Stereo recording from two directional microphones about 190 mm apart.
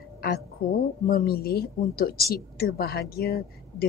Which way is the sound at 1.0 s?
50° left (ahead or behind).